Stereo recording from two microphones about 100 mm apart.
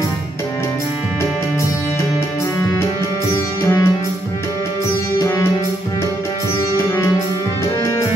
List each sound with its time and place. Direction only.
3.6 s music: 35° left (ahead or behind)